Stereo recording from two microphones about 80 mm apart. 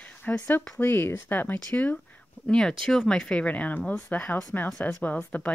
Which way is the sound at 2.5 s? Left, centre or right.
Centre.